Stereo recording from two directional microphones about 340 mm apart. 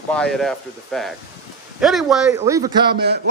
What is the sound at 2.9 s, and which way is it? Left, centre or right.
Speech, right.